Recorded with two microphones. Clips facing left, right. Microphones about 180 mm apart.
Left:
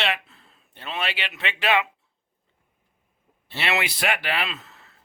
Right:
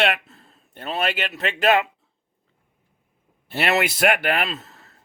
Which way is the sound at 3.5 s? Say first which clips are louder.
Right 5 dB; 45° right (ahead or behind).